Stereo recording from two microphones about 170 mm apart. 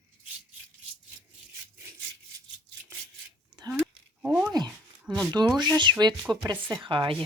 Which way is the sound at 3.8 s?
5° right (ahead or behind).